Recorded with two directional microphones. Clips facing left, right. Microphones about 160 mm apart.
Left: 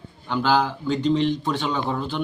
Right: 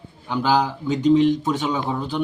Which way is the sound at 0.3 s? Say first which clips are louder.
Right 1 dB; centre (ahead or behind).